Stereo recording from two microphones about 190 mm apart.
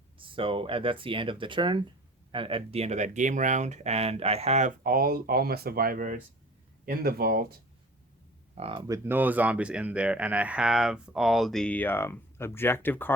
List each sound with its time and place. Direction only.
0.2 s speech: 30° right (ahead or behind); by 7.4 s 55° right (ahead or behind)
8.5 s speech: 30° right (ahead or behind)
8.9 s speech: 10° right (ahead or behind); by 13.1 s 10° left (ahead or behind)